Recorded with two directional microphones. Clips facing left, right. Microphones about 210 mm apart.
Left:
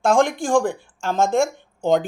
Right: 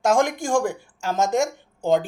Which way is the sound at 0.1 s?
40° right (ahead or behind).